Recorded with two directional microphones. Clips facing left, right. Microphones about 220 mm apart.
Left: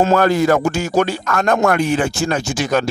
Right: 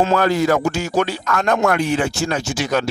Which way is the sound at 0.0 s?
45° left (ahead or behind).